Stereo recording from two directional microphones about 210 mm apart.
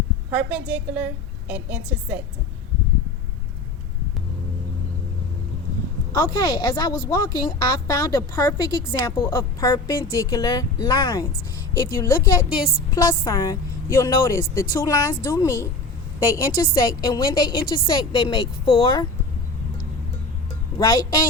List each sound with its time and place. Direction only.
0.3 s a woman's voice: 5° right (ahead or behind)
6.1 s a woman's voice: 15° left (ahead or behind)
20.7 s a woman's voice: 15° left (ahead or behind)